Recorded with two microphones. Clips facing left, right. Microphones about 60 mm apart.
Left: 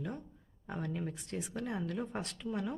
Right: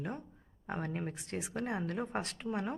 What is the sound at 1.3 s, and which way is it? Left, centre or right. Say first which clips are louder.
Speech: right 1 dB; right.